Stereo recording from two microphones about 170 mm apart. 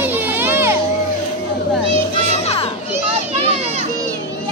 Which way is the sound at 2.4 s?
35° left (ahead or behind).